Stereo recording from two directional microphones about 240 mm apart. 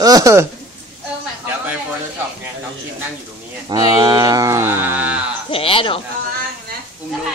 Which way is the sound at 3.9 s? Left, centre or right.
Centre.